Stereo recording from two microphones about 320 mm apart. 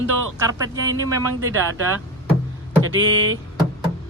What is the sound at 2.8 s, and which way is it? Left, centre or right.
Music, right.